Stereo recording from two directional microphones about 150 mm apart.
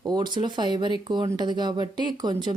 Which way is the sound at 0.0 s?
25° right (ahead or behind).